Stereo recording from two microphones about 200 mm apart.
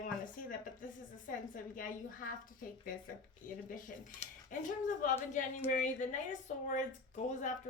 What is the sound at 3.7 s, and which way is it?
A woman's voice, 40° left (ahead or behind).